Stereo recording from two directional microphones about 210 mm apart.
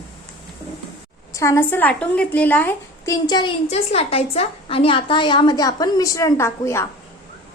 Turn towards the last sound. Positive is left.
turn(degrees=15)  # may be behind; listen again after turning